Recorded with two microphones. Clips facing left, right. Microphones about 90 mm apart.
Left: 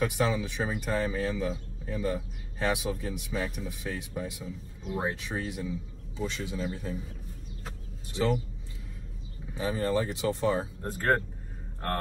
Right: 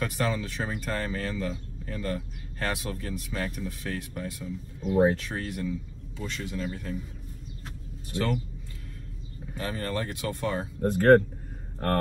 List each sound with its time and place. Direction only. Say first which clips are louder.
0.0 s speech: left 1 dB; 10° left (ahead or behind)
9.6 s speech: left 3 dB; 10° left (ahead or behind)
10.9 s speech: right 9 dB; 65° right (ahead or behind)